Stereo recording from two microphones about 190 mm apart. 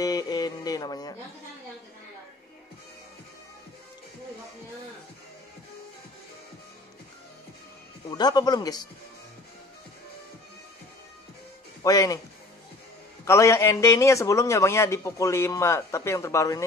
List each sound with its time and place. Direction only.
0.0 s music: 20° left (ahead or behind)
8.1 s speech: 20° left (ahead or behind)
11.8 s a man's voice: 15° left (ahead or behind)
13.2 s a man's voice: 15° left (ahead or behind)